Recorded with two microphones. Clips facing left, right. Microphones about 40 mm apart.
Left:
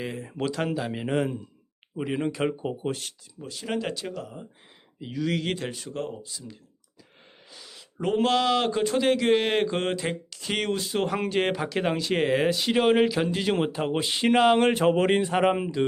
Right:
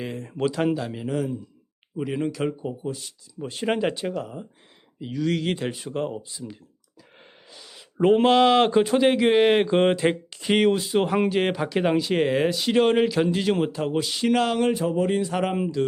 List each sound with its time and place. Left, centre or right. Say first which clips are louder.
0.0 s speech: right 3 dB; centre
1.0 s a man's voice: left 1 dB; left
2.0 s speech: right 1 dB; centre
2.8 s speech: left 1 dB; left
3.4 s speech: right 7 dB; right
3.8 s speech: right 5 dB; centre
4.9 s speech: right 3 dB; centre; by 6.4 s right
7.5 s a sound: right 1 dB; centre
7.9 s speech: right 6 dB; right; by 9.8 s centre
9.8 s speech: right 8 dB; right
10.5 s speech: right 7 dB; centre
13.6 s speech: right 2 dB; left
14.6 s speech: left 1 dB; left
15.4 s speech: left 2 dB; centre